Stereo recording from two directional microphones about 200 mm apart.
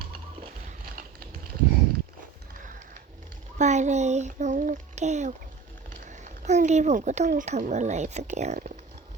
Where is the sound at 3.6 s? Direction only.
35° right (ahead or behind).